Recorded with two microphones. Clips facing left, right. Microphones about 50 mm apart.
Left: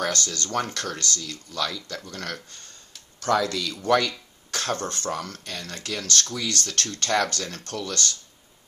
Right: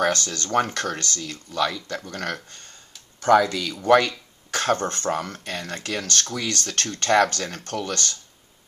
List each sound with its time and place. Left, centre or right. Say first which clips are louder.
0.0 s speech: right 4 dB; right